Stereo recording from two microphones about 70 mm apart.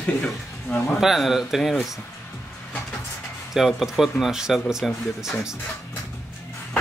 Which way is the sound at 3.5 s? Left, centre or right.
Centre.